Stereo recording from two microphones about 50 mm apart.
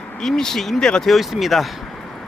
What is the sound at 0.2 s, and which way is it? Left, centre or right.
Speech, centre.